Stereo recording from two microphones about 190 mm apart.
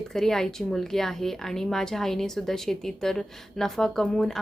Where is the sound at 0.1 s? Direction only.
Centre (ahead or behind).